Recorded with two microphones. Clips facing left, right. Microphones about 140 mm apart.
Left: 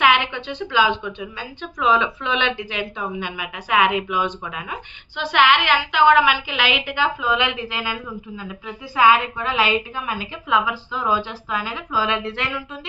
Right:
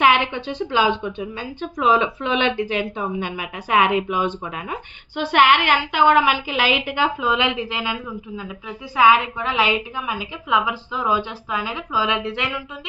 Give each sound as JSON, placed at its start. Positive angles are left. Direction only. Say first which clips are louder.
{"t": 0.0, "sound": "speech", "louder": "right 1 dB", "side_deg": -35}
{"t": 7.5, "sound": "a woman's voice", "louder": "right 2 dB", "side_deg": -20}